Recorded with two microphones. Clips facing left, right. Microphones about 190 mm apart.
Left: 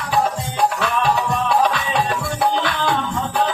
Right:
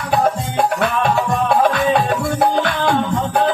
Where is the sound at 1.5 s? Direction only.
50° right (ahead or behind).